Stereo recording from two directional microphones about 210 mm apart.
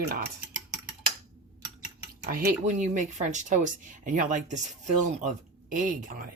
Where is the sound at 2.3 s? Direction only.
45° right (ahead or behind).